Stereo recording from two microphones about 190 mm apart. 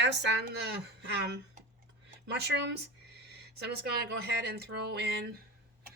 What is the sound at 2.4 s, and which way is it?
A woman's voice, 60° right (ahead or behind).